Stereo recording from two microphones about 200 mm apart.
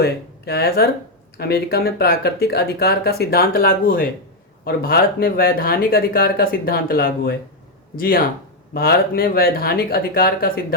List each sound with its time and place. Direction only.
0.0 s speech: 55° left (ahead or behind)